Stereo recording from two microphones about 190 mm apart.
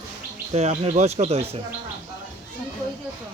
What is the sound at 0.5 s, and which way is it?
Speech, 35° right (ahead or behind).